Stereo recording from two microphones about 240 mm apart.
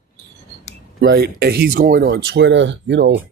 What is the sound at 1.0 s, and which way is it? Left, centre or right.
Speech, right.